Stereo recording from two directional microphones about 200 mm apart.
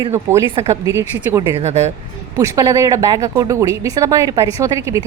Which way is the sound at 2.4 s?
15° right (ahead or behind).